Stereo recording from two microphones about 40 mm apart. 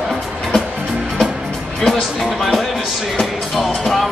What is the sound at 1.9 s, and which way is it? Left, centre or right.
Speech, centre.